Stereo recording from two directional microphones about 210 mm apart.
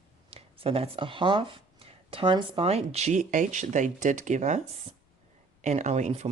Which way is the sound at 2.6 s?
30° right (ahead or behind).